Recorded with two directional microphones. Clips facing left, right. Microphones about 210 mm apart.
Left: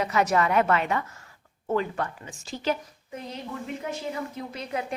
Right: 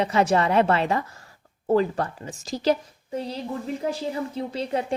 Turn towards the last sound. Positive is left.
turn(degrees=-30)  # may be behind; listen again after turning